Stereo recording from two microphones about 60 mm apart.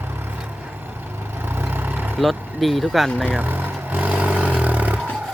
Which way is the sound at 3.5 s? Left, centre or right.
Right.